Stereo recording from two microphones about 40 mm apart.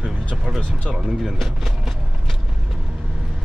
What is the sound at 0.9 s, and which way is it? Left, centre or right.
Music, centre.